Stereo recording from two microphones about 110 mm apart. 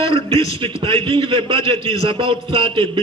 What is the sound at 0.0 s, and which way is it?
A man's voice, 60° right (ahead or behind).